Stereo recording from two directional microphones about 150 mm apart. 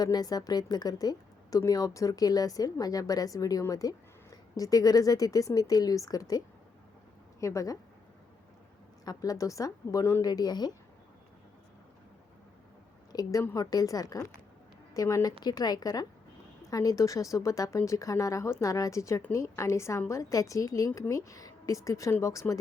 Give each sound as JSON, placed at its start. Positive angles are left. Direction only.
{"t": 0.0, "sound": "a woman's voice", "side_deg": 25}
{"t": 9.0, "sound": "speech", "side_deg": 25}
{"t": 13.1, "sound": "speech", "side_deg": 20}